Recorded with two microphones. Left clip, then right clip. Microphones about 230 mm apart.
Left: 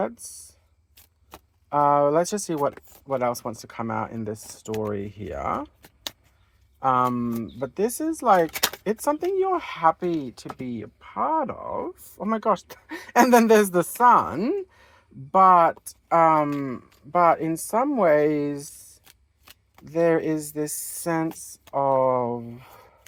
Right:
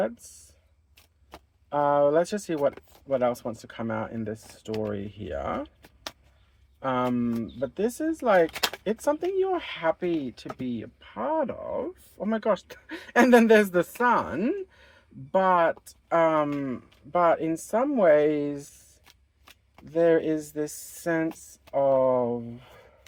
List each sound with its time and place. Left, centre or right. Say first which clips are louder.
1.3 s a sound: left 4 dB; left
2.5 s speech: left 1 dB; left
6.7 s speech: left 6 dB; left
19.8 s speech: left 1 dB; left